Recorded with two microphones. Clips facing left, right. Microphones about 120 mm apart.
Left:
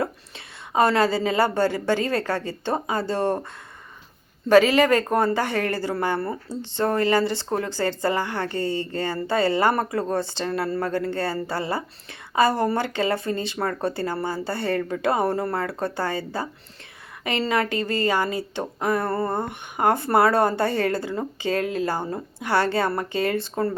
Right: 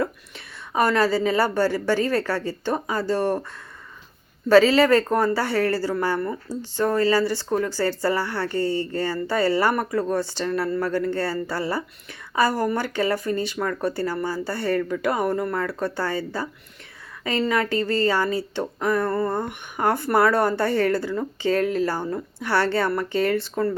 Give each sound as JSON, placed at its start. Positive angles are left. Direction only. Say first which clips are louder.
{"t": 0.0, "sound": "a woman's voice", "louder": "right 1 dB", "side_deg": 25}
{"t": 4.4, "sound": "speech", "louder": "right 1 dB", "side_deg": 15}